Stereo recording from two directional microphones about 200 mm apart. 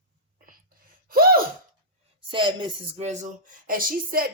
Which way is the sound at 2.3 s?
25° right (ahead or behind).